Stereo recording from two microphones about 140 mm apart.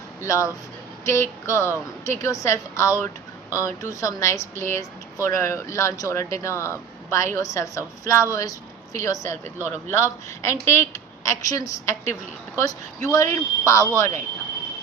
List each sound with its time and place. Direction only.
0.2 s a woman's voice: 20° left (ahead or behind)